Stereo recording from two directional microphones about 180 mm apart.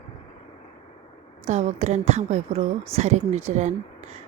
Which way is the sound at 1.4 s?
35° right (ahead or behind).